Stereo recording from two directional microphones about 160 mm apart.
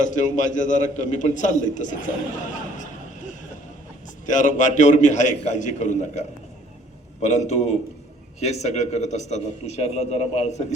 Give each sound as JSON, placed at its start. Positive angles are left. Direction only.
{"t": 0.1, "sound": "a man's voice", "side_deg": 50}
{"t": 2.7, "sound": "a sound", "side_deg": 50}
{"t": 4.3, "sound": "a man's voice", "side_deg": 50}